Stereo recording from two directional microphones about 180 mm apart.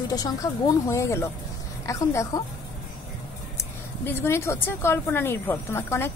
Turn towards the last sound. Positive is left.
turn(degrees=15)  # may be behind; listen again after turning